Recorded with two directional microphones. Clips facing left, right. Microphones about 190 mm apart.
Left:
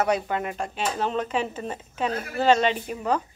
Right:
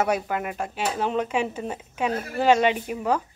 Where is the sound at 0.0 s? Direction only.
5° right (ahead or behind).